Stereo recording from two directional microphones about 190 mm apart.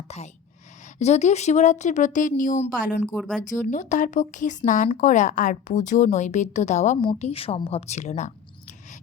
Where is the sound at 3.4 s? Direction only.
40° left (ahead or behind).